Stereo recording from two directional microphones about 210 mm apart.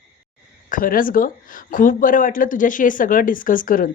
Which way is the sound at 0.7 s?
40° left (ahead or behind).